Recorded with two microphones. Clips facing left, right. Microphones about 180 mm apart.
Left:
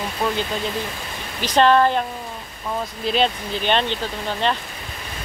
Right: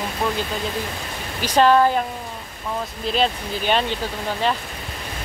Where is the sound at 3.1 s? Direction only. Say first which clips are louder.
Even; 5° right (ahead or behind).